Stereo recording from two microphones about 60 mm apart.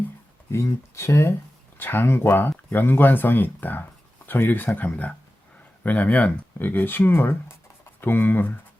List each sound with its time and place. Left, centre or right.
0.5 s speech: left
1.8 s speech: left
7.1 s speech: left